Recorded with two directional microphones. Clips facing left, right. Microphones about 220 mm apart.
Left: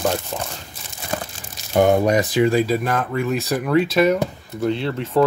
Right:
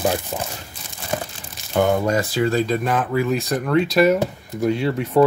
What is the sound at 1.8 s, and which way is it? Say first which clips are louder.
Speech: left 3 dB; 20° left (ahead or behind).